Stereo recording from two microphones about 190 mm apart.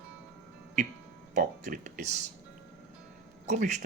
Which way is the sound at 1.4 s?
40° right (ahead or behind).